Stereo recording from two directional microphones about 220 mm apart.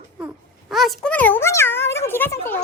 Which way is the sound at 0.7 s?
Centre (ahead or behind).